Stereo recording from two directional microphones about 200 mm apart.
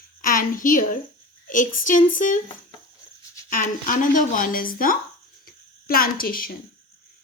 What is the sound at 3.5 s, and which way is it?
A woman's voice, 40° left (ahead or behind).